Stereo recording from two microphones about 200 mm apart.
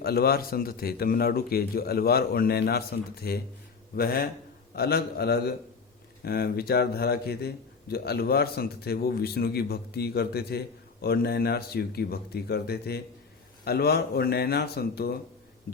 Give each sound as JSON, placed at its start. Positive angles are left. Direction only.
{"t": 0.0, "sound": "a man's voice", "side_deg": 50}